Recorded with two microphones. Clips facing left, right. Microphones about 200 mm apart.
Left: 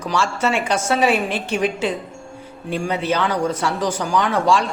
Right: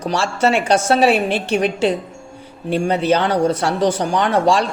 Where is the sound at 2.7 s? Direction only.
30° right (ahead or behind).